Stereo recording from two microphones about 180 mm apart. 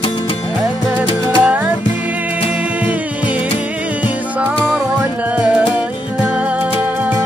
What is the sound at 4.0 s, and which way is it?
Music, 5° right (ahead or behind).